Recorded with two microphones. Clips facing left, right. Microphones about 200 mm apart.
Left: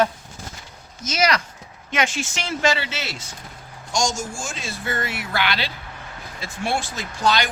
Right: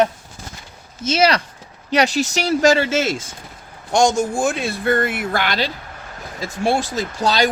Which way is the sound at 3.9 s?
60° right (ahead or behind).